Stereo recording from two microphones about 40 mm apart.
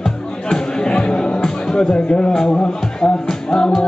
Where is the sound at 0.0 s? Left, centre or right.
Centre.